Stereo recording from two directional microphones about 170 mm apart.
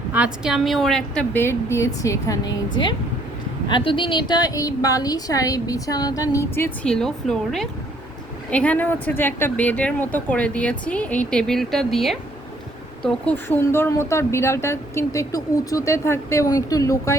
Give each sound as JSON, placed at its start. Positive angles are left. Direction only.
{"t": 0.1, "sound": "a woman's voice", "side_deg": -5}